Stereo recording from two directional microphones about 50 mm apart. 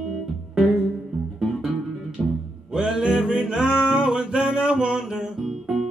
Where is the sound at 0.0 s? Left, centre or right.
Centre.